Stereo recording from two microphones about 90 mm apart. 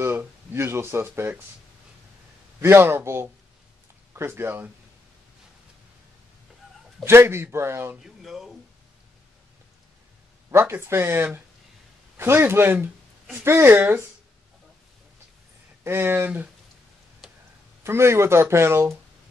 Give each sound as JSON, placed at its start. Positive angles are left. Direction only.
{"t": 0.0, "sound": "speech", "side_deg": -25}
{"t": 2.6, "sound": "speech", "side_deg": -25}
{"t": 7.1, "sound": "speech", "side_deg": -30}
{"t": 8.0, "sound": "speech", "side_deg": -5}
{"t": 10.5, "sound": "speech", "side_deg": -30}
{"t": 15.8, "sound": "speech", "side_deg": -25}
{"t": 17.2, "sound": "a sound", "side_deg": 0}
{"t": 17.8, "sound": "speech", "side_deg": -30}